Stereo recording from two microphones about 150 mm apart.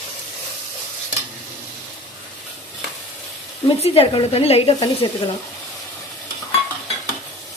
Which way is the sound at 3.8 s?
40° left (ahead or behind).